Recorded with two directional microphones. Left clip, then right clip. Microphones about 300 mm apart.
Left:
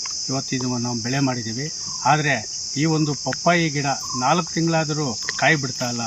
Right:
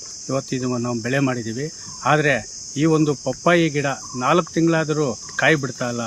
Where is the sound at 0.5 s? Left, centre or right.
Centre.